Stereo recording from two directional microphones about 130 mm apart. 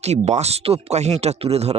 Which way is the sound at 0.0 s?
60° right (ahead or behind).